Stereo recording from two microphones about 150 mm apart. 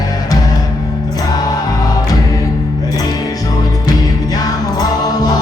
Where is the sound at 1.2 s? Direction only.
25° left (ahead or behind).